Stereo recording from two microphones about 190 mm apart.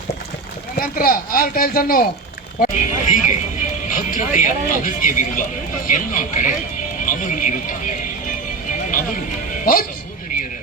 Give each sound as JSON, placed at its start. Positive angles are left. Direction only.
{"t": 0.8, "sound": "speech", "side_deg": 50}